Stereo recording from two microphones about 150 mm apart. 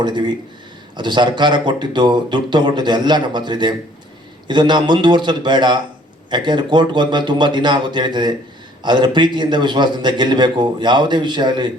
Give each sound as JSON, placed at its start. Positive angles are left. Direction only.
{"t": 0.0, "sound": "a man's voice", "side_deg": -30}